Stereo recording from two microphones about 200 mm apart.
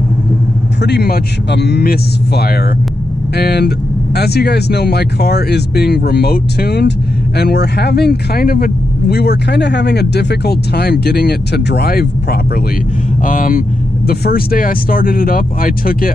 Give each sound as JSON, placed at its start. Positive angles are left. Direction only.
{"t": 0.8, "sound": "speech", "side_deg": 55}
{"t": 13.2, "sound": "speech", "side_deg": 40}